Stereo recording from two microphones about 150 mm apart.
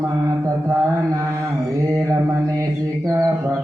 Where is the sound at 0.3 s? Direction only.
20° right (ahead or behind).